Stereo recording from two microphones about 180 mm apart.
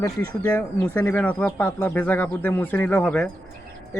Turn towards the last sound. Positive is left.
turn(degrees=5)  # may be behind; listen again after turning